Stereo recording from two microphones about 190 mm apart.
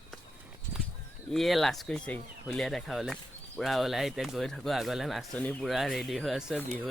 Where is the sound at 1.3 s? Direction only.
Centre (ahead or behind).